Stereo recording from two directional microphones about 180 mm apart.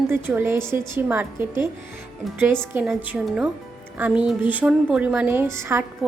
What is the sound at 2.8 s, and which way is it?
A woman's voice, 5° right (ahead or behind).